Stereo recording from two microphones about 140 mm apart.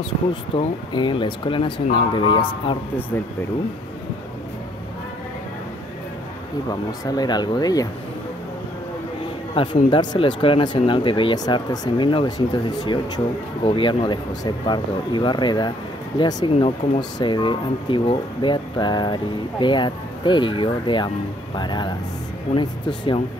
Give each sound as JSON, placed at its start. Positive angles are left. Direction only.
{"t": 0.5, "sound": "speech", "side_deg": 35}
{"t": 6.7, "sound": "speech", "side_deg": 25}
{"t": 9.8, "sound": "speech", "side_deg": 35}